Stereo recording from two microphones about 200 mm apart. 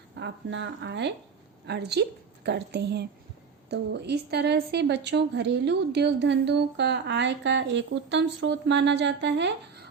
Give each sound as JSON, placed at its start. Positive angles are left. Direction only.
{"t": 0.2, "sound": "a woman's voice", "side_deg": -65}